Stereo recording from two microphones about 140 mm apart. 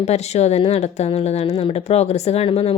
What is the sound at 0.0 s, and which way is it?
Speech, 50° left (ahead or behind).